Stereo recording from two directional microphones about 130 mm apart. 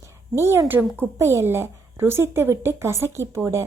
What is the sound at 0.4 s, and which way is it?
A woman's voice, 20° right (ahead or behind).